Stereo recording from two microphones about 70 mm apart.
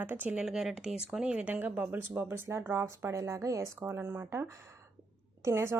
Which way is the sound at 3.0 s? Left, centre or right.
Right.